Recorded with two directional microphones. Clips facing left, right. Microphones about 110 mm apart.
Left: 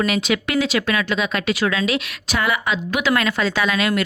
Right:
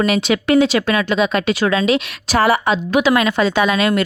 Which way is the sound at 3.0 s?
20° right (ahead or behind).